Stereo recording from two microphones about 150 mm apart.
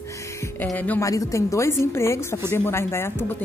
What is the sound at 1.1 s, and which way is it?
A man's voice, 20° left (ahead or behind).